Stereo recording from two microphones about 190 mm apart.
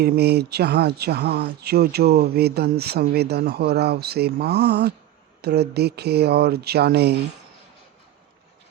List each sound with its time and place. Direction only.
0.0 s speech: 60° right (ahead or behind)